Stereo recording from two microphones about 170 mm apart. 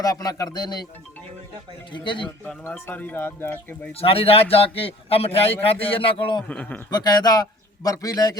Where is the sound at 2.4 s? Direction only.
10° left (ahead or behind).